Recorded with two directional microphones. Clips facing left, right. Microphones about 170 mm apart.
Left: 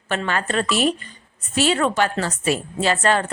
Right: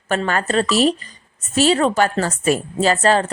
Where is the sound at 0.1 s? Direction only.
40° right (ahead or behind).